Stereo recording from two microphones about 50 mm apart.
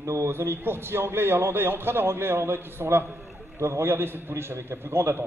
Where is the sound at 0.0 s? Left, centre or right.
Right.